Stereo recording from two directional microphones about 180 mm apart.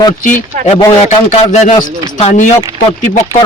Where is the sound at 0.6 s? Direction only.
40° left (ahead or behind).